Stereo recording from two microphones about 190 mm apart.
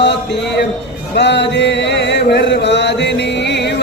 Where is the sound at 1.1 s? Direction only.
65° left (ahead or behind).